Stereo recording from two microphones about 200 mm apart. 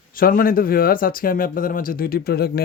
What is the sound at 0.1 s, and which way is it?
Speech, 45° left (ahead or behind).